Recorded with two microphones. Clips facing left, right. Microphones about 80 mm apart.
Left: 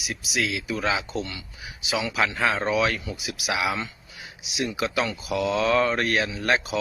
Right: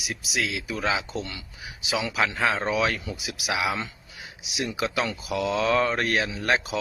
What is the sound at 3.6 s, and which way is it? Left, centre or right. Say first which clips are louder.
Speech: left 1 dB; right.